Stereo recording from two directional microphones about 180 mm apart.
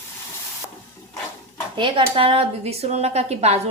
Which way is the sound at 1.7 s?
30° right (ahead or behind).